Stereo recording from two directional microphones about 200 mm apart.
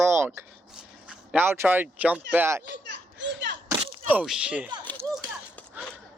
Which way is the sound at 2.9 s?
60° right (ahead or behind).